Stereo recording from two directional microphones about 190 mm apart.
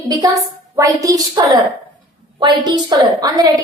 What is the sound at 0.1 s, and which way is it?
A woman's voice, 20° right (ahead or behind).